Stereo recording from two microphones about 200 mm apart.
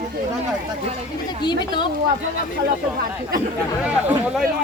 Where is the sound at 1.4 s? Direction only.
20° left (ahead or behind).